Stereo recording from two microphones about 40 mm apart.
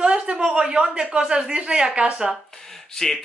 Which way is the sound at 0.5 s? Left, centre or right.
Centre.